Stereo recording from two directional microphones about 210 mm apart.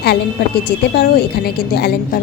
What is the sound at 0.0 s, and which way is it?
A woman's voice, 50° left (ahead or behind).